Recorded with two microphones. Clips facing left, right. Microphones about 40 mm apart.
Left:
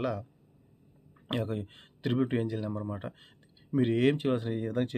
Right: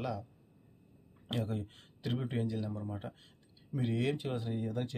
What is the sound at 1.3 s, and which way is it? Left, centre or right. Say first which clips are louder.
Speech: left 4 dB; left.